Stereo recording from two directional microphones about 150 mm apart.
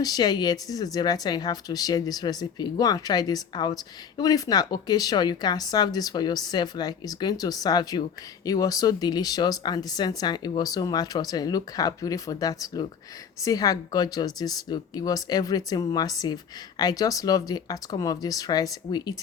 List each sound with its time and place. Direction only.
0.0 s speech: 25° left (ahead or behind)